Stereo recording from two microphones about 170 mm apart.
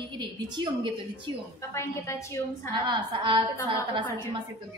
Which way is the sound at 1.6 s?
15° left (ahead or behind).